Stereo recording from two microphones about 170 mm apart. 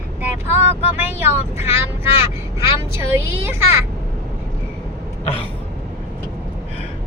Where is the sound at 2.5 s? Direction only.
15° right (ahead or behind).